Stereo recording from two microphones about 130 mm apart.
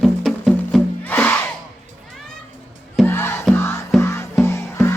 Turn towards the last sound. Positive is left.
turn(degrees=20)  # may be behind; listen again after turning